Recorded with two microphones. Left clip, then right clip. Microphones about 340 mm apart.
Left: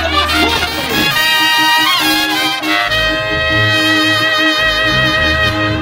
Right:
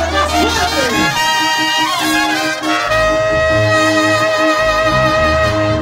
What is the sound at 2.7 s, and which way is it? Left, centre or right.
Music, right.